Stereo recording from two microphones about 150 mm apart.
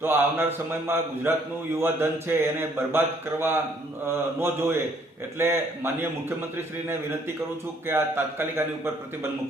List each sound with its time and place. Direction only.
0.0 s speech: 15° right (ahead or behind)
4.0 s speech: 15° right (ahead or behind)
7.9 s speech: 15° right (ahead or behind)